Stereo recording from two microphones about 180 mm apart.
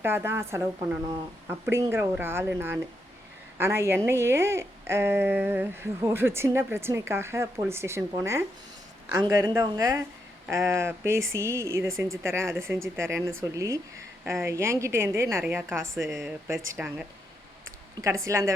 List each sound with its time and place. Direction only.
0.0 s a woman's voice: 15° right (ahead or behind)
16.0 s speech: centre (ahead or behind)
16.5 s a woman's voice: 10° right (ahead or behind)
18.3 s a woman's voice: 15° right (ahead or behind)